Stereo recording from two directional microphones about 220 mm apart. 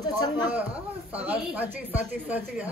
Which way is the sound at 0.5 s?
5° right (ahead or behind).